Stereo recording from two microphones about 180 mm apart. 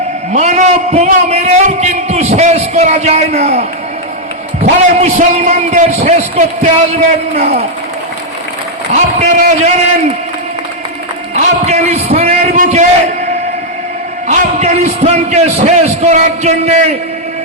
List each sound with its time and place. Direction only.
0.3 s a man's voice: 40° right (ahead or behind)
8.9 s a man's voice: 40° right (ahead or behind)
11.3 s a sound: 40° right (ahead or behind)
14.3 s a man's voice: 40° right (ahead or behind)